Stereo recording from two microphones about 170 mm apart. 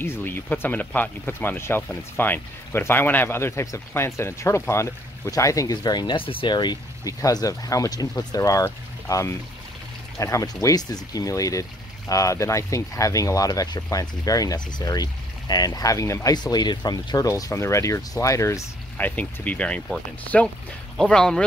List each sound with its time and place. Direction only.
0.0 s speech: 15° left (ahead or behind)